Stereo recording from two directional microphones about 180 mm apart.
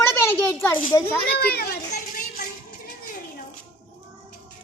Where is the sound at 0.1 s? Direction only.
15° left (ahead or behind).